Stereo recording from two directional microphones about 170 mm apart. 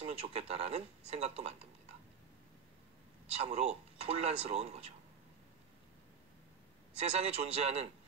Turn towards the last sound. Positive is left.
turn(degrees=-40)  # may be behind; listen again after turning